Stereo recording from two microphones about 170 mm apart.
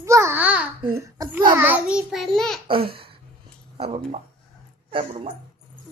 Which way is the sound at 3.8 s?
35° right (ahead or behind).